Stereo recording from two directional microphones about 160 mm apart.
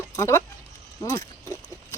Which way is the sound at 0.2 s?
15° left (ahead or behind).